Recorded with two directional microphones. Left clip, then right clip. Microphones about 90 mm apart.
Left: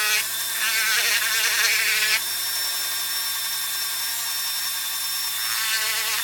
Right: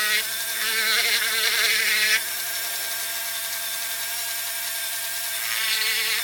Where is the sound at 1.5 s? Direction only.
30° right (ahead or behind).